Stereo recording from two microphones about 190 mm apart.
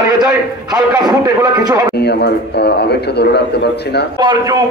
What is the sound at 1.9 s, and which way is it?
A man's voice, 60° left (ahead or behind).